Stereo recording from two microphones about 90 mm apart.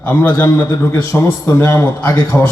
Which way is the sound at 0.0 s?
20° left (ahead or behind).